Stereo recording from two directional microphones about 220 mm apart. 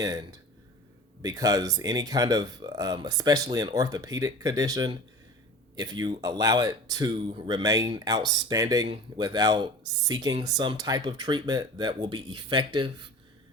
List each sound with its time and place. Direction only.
0.0 s speech: 15° right (ahead or behind)